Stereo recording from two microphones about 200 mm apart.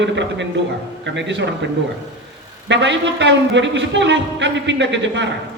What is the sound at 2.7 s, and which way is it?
A man's voice, 65° right (ahead or behind).